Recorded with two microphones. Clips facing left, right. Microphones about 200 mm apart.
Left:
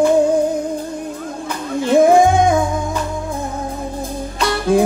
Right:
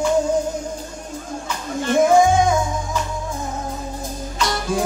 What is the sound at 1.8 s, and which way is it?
Music, 60° left (ahead or behind).